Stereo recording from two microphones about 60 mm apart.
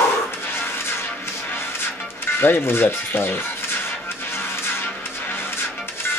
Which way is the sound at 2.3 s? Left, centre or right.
Left.